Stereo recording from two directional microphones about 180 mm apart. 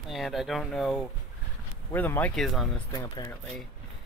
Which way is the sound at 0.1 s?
Centre (ahead or behind).